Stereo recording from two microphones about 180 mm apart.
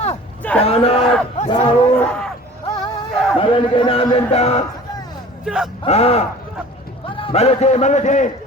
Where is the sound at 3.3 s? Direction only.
30° left (ahead or behind).